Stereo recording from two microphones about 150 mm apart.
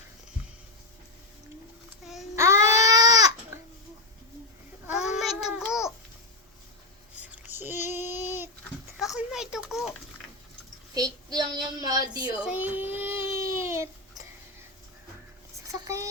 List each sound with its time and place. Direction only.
2.3 s music: 20° right (ahead or behind)
4.9 s child singing: 5° right (ahead or behind)
7.5 s female singing: 15° right (ahead or behind)
7.9 s child singing: 15° right (ahead or behind)
9.0 s a sound: 5° right (ahead or behind)
10.9 s child singing: 25° right (ahead or behind)
12.4 s baby cry: 10° right (ahead or behind)
15.6 s a sound: 20° right (ahead or behind)